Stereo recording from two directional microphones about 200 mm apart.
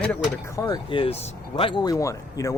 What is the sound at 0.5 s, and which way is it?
Speech, 20° left (ahead or behind).